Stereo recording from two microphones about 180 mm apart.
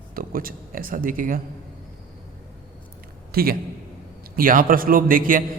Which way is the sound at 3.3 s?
55° right (ahead or behind).